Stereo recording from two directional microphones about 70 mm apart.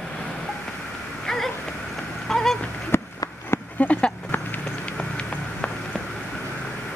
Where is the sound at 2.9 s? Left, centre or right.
Left.